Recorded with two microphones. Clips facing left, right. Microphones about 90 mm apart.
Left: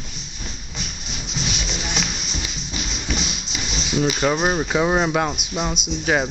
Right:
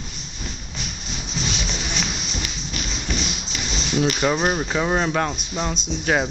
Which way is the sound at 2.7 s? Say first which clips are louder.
Left 1 dB; 15° left (ahead or behind).